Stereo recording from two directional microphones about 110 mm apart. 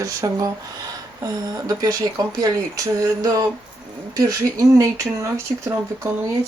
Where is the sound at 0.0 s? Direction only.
30° right (ahead or behind).